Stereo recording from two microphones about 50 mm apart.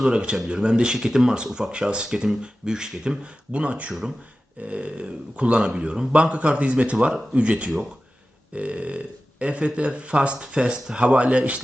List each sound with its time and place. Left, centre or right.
0.0 s speech: centre